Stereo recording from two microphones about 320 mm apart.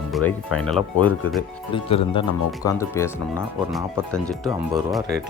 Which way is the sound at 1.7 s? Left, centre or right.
Centre.